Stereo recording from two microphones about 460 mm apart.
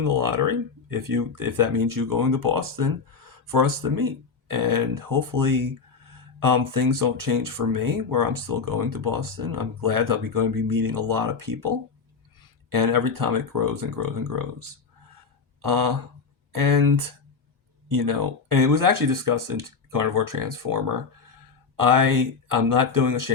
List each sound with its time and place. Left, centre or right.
0.0 s speech: right